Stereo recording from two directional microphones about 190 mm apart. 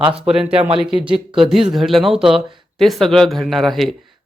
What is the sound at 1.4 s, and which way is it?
Speech, centre (ahead or behind).